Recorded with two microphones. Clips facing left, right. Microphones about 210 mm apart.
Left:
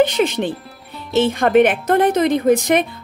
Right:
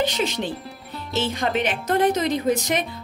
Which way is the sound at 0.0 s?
55° left (ahead or behind).